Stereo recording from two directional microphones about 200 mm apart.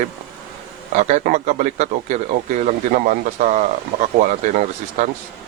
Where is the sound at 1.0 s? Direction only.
35° right (ahead or behind).